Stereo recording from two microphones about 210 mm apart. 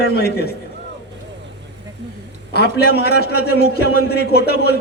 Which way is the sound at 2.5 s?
50° left (ahead or behind).